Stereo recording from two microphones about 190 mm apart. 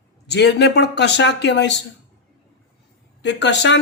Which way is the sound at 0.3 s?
65° left (ahead or behind).